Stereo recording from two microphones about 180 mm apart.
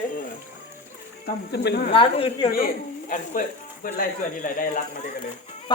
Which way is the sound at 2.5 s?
55° left (ahead or behind).